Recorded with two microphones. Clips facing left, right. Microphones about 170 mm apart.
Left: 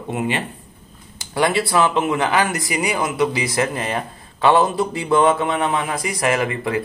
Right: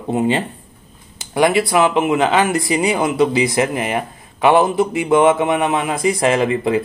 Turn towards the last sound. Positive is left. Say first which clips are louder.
# right 5 dB
turn(degrees=-20)  # may be behind; listen again after turning